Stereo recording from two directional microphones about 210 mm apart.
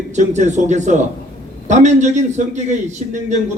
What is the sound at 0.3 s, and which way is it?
Speech, 35° right (ahead or behind).